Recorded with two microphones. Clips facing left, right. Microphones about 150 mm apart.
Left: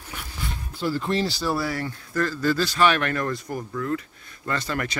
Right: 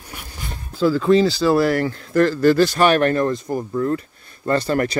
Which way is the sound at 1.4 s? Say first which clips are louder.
Right 10 dB; 90° right.